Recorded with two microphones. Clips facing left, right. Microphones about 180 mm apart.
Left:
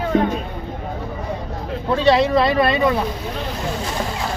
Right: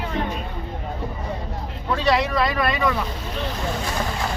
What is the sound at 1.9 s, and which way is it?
Speech, 30° left (ahead or behind).